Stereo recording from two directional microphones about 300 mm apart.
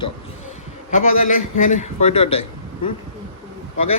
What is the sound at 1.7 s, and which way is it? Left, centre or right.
Speech, left.